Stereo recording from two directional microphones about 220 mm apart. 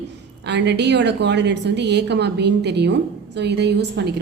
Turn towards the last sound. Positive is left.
turn(degrees=-50)  # may be behind; listen again after turning